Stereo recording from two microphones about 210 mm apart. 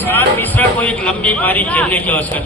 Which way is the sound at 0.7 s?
5° left (ahead or behind).